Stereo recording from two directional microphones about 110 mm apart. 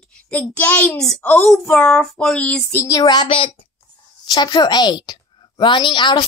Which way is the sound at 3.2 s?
55° left (ahead or behind).